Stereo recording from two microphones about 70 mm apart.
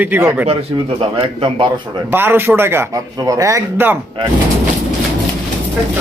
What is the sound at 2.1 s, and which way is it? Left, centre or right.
Speech, right.